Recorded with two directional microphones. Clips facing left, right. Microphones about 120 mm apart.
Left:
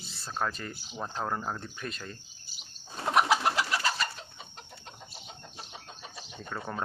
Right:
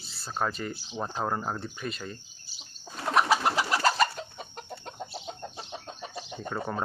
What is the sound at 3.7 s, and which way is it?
Bird, 40° right (ahead or behind).